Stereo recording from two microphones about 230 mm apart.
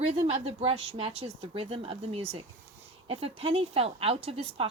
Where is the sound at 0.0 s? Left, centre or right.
Right.